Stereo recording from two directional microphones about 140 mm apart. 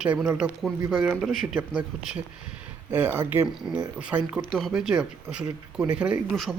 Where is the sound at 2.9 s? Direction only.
15° right (ahead or behind).